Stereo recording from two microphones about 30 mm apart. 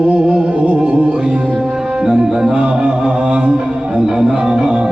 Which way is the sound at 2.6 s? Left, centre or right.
Right.